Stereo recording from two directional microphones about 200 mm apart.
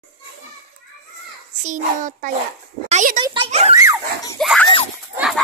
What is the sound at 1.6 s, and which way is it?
A child's voice, 40° right (ahead or behind).